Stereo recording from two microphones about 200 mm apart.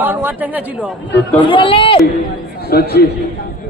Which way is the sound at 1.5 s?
25° left (ahead or behind).